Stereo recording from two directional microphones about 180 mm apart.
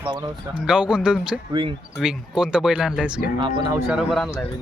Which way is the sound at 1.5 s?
30° right (ahead or behind).